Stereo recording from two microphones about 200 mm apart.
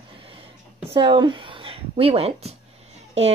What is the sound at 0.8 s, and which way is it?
Speech, 25° right (ahead or behind).